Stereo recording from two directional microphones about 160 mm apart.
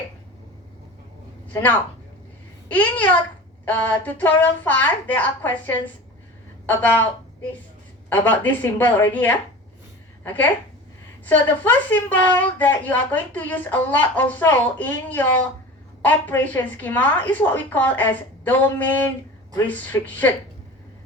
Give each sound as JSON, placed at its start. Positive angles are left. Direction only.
{"t": 2.6, "sound": "a woman's voice", "side_deg": 10}
{"t": 8.1, "sound": "a woman's voice", "side_deg": 10}
{"t": 11.3, "sound": "a woman's voice", "side_deg": 10}